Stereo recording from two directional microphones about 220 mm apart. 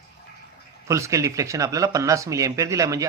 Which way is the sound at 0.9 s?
15° right (ahead or behind).